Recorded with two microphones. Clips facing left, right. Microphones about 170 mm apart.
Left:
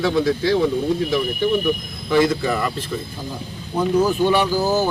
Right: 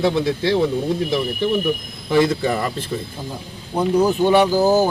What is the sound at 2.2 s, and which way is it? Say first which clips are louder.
Speech: right 1 dB; 25° right (ahead or behind).